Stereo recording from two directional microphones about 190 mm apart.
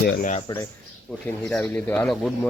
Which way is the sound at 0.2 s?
40° left (ahead or behind).